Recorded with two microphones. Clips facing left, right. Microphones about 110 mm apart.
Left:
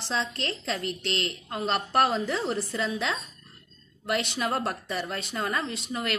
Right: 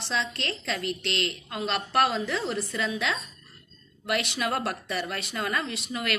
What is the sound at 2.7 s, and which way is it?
Speech, 25° left (ahead or behind).